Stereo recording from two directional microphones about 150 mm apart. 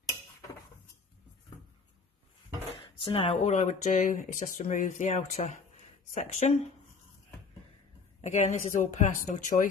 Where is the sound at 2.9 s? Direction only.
35° left (ahead or behind).